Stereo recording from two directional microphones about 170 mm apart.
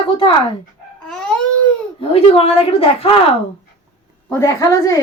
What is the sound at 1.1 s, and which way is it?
Baby cry, 5° left (ahead or behind).